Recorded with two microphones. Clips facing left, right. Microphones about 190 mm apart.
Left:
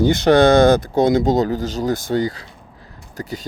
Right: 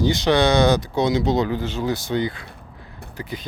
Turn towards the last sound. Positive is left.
turn(degrees=40)  # may be behind; listen again after turning